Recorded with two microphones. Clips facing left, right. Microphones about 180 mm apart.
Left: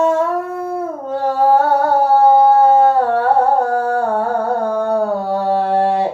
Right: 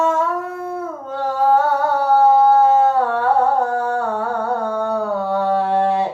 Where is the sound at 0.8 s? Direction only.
35° left (ahead or behind).